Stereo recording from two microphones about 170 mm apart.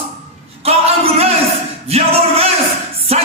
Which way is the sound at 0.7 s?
35° right (ahead or behind).